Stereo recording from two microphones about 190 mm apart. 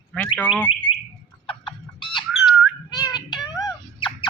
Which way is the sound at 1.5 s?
25° left (ahead or behind).